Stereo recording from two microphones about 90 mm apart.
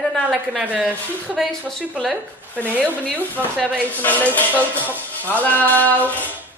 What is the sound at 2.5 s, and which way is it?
Speech, 15° left (ahead or behind).